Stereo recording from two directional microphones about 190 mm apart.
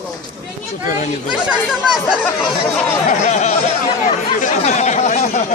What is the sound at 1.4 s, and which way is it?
Speech, 5° right (ahead or behind).